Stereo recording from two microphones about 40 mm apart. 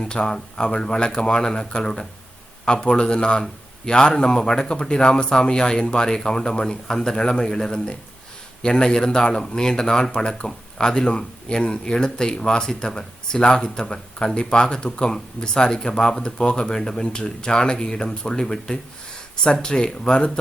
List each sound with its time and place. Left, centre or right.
0.0 s speech: left